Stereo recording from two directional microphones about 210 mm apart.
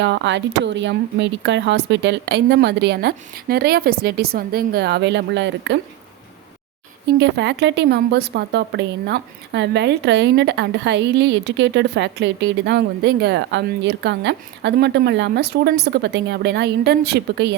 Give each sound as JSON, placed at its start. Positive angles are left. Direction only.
{"t": 0.0, "sound": "speech", "side_deg": -55}
{"t": 7.2, "sound": "a woman's voice", "side_deg": -55}